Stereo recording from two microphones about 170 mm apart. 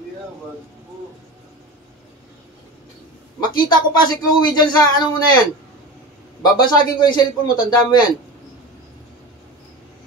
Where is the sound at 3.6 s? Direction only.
25° left (ahead or behind).